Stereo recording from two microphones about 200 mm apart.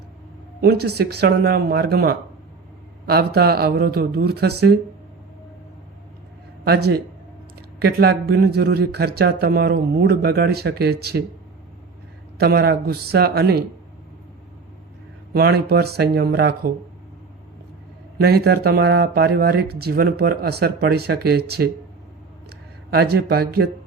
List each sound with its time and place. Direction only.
0.6 s speech: 50° right (ahead or behind)
6.7 s speech: 55° right (ahead or behind)
12.4 s speech: 50° right (ahead or behind)
15.3 s speech: 50° right (ahead or behind)
18.2 s speech: 50° right (ahead or behind)
22.4 s a sound: 55° right (ahead or behind)